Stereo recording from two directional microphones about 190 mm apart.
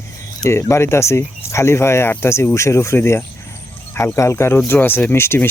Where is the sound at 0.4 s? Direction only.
15° left (ahead or behind).